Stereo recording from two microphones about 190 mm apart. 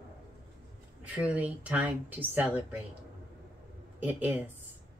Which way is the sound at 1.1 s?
5° right (ahead or behind).